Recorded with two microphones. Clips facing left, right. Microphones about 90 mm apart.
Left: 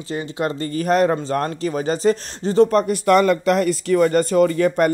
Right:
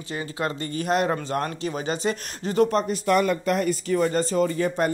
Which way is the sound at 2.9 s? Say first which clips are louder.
Left 6 dB; 85° left.